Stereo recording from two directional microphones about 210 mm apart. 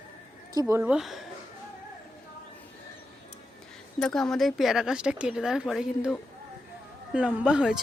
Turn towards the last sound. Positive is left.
turn(degrees=-5)  # may be behind; listen again after turning